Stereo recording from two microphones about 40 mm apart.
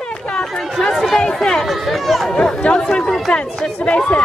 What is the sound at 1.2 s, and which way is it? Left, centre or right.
Chatter, centre.